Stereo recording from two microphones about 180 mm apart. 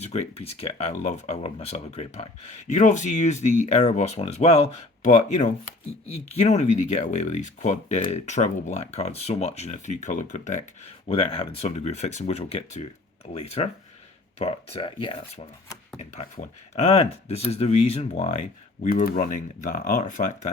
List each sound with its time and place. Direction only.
0.0 s speech: 35° left (ahead or behind)
11.1 s speech: 30° left (ahead or behind)
16.7 s speech: 35° left (ahead or behind)